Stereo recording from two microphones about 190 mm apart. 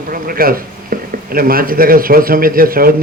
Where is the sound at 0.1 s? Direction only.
50° right (ahead or behind).